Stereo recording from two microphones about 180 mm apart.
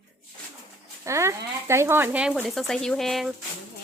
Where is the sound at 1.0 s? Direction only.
15° right (ahead or behind); by 3.3 s centre (ahead or behind).